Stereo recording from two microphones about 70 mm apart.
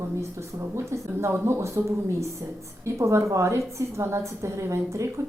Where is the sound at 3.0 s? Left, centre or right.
Right.